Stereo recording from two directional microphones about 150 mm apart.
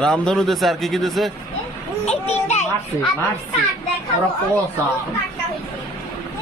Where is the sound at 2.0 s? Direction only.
45° left (ahead or behind).